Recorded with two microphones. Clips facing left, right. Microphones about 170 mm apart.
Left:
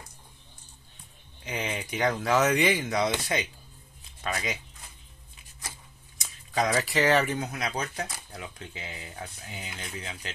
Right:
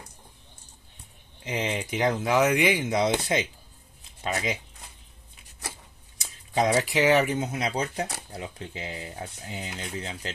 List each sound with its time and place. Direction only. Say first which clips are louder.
1.4 s speech: right 4 dB; 20° right (ahead or behind)
6.5 s speech: right 3 dB; 25° right (ahead or behind)